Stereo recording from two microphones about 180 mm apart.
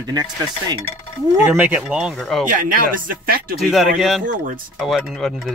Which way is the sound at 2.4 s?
50° right (ahead or behind).